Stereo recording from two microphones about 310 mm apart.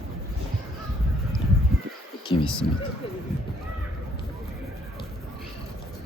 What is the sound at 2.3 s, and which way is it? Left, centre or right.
Speech, centre.